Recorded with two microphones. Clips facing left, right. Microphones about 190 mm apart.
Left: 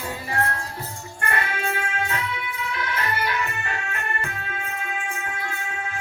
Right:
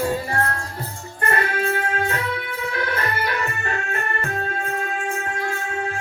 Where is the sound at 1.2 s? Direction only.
40° right (ahead or behind).